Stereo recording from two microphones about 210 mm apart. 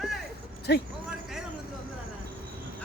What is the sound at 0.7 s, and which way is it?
Speech, 50° left (ahead or behind).